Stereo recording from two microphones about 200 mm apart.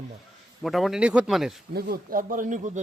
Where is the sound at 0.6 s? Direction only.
Centre (ahead or behind).